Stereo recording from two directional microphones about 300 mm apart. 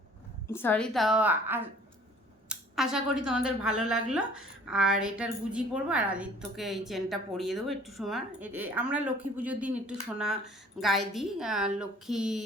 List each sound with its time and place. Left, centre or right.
0.5 s a woman's voice: centre